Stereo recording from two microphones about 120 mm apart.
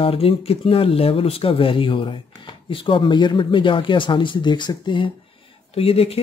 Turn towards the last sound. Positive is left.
turn(degrees=55)  # may be behind; listen again after turning